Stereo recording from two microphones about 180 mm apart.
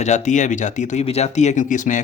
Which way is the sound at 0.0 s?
40° left (ahead or behind).